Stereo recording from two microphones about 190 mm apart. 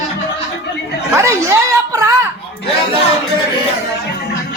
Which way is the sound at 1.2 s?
15° right (ahead or behind).